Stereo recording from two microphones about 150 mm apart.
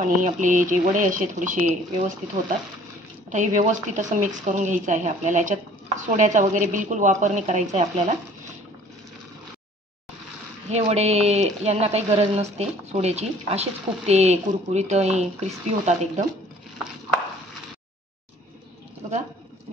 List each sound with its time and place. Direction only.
0.0 s a woman's voice: 60° right (ahead or behind)
3.3 s a woman's voice: 55° right (ahead or behind)
10.7 s speech: 45° right (ahead or behind)